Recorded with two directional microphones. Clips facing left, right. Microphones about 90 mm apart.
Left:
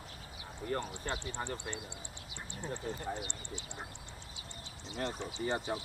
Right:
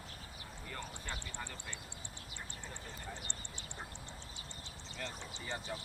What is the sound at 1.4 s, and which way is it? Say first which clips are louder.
Speech: left 8 dB; 55° left (ahead or behind).